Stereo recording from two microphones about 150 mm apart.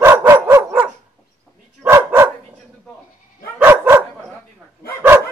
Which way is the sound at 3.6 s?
15° right (ahead or behind).